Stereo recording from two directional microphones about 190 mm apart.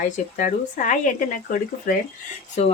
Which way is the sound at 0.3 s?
45° left (ahead or behind).